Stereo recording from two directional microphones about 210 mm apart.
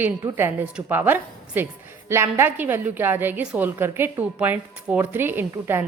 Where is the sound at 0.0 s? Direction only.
10° right (ahead or behind).